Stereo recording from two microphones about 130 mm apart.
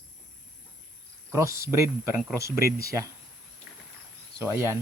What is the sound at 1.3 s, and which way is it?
Speech, 20° right (ahead or behind).